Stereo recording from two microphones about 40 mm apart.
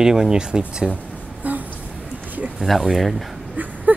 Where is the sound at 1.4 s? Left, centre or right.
Right.